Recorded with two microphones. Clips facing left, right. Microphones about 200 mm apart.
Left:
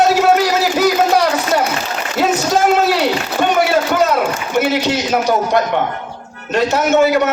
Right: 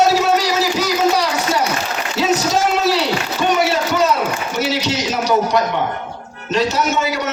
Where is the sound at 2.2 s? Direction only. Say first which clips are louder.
Left 2 dB; 55° left (ahead or behind).